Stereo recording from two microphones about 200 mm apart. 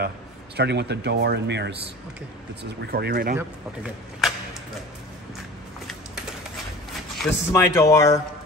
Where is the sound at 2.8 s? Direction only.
55° right (ahead or behind).